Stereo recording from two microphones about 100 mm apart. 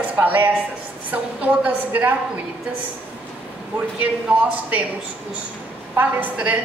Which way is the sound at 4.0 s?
15° right (ahead or behind).